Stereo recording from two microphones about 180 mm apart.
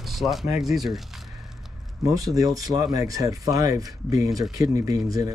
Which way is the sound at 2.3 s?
20° right (ahead or behind).